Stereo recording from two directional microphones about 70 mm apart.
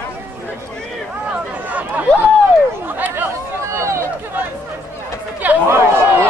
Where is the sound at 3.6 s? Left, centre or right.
Right.